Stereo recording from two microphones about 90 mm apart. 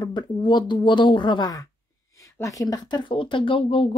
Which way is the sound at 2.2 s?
40° left (ahead or behind).